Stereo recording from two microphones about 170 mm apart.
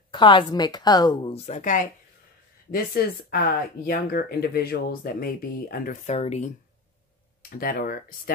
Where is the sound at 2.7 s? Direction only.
60° left (ahead or behind); by 6.5 s 40° left (ahead or behind).